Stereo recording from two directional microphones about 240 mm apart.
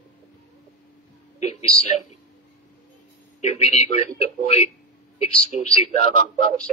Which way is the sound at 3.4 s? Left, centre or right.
Left.